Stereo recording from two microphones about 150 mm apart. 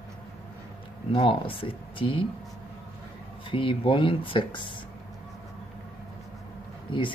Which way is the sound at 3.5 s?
35° left (ahead or behind).